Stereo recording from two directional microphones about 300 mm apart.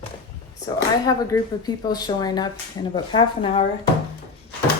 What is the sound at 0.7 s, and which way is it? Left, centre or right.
Speech, centre.